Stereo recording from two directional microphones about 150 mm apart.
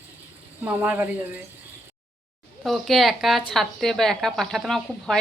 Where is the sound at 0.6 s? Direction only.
10° right (ahead or behind).